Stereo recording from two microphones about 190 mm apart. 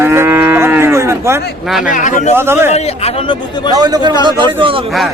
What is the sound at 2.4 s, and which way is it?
Speech, 10° right (ahead or behind).